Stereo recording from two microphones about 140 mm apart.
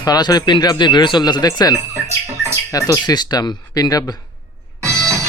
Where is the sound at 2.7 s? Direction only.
25° left (ahead or behind).